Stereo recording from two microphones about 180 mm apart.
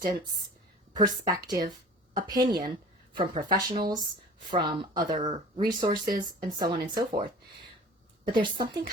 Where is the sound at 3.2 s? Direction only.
30° right (ahead or behind).